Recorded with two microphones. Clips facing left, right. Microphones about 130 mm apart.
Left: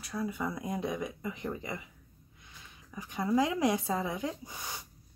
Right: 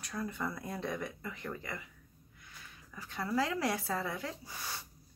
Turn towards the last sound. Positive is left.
turn(degrees=15)  # may be behind; listen again after turning